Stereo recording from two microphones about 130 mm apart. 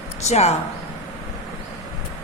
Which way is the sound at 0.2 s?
55° left (ahead or behind).